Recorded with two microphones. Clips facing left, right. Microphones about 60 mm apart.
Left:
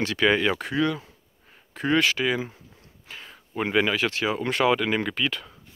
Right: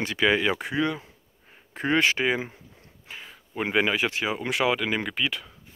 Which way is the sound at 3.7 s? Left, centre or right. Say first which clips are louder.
Left 1 dB; centre.